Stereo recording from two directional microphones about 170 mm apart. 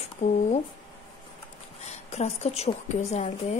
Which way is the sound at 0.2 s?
45° left (ahead or behind).